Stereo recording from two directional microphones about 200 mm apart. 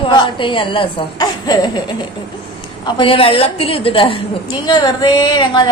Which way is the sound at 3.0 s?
25° left (ahead or behind).